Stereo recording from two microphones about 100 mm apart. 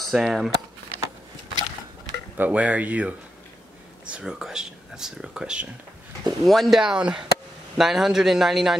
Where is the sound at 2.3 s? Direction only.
15° right (ahead or behind).